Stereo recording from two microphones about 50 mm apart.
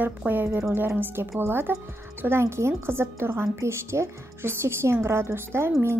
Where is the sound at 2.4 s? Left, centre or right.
Right.